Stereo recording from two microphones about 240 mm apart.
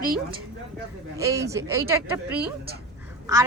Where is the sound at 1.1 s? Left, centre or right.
Centre.